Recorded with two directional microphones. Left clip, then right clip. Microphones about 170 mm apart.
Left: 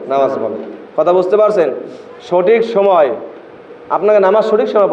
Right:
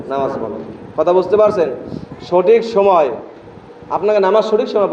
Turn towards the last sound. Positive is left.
turn(degrees=10)  # may be behind; listen again after turning